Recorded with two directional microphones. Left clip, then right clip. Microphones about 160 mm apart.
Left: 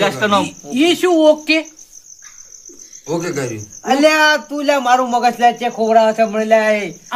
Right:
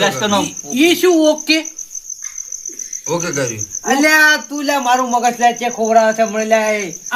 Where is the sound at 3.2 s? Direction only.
90° left.